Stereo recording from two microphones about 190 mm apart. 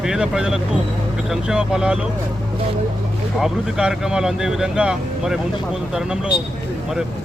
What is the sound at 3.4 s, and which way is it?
Speech, 5° right (ahead or behind).